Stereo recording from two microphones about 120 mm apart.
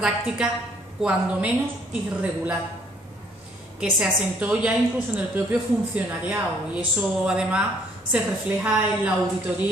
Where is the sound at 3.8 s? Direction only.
10° right (ahead or behind).